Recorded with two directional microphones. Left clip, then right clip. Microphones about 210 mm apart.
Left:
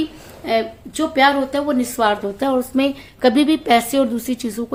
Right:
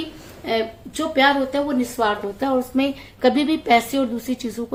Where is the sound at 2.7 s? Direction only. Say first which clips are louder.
Left 3 dB; 20° left (ahead or behind).